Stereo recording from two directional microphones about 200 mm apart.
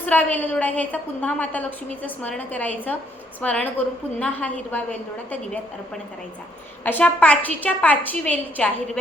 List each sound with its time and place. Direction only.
0.0 s a woman's voice: 10° left (ahead or behind)
6.8 s a woman's voice: 5° left (ahead or behind)